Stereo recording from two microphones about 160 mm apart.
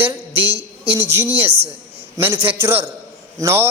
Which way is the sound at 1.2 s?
15° right (ahead or behind).